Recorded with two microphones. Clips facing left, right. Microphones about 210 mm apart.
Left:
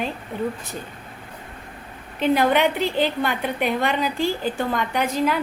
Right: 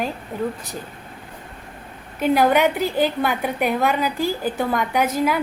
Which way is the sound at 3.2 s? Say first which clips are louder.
Right 2 dB; 5° right (ahead or behind).